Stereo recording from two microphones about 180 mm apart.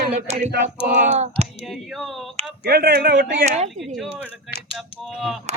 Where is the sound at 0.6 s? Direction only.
45° right (ahead or behind).